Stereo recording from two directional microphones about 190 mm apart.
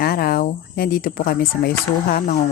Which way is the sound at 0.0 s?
55° left (ahead or behind).